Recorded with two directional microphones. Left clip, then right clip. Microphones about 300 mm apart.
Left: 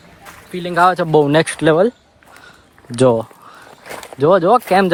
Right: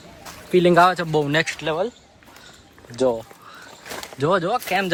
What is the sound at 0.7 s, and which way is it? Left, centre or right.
Speech, centre.